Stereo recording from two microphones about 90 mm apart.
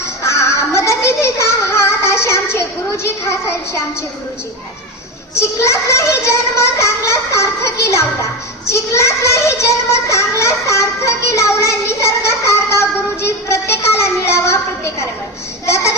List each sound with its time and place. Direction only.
0.2 s music: 35° left (ahead or behind)
5.3 s a child's voice: 30° left (ahead or behind)
13.2 s a sound: 30° left (ahead or behind)
15.6 s a child's voice: 35° left (ahead or behind)